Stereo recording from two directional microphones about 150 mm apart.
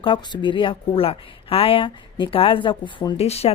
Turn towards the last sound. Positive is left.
turn(degrees=45)  # may be behind; listen again after turning